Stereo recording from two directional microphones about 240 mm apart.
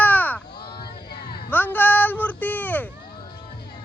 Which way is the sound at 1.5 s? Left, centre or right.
Centre.